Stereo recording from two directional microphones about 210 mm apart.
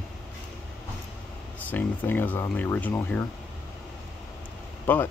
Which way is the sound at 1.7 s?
10° left (ahead or behind).